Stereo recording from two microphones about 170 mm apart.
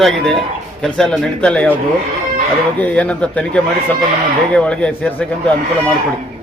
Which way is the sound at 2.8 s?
5° left (ahead or behind).